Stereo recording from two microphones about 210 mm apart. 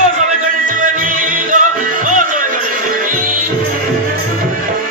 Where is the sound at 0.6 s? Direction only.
40° right (ahead or behind).